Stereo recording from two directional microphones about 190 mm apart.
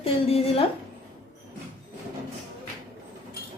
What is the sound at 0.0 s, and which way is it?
Speech, 30° left (ahead or behind).